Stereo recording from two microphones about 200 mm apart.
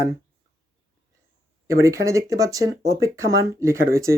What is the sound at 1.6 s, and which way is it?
Speech, 15° right (ahead or behind).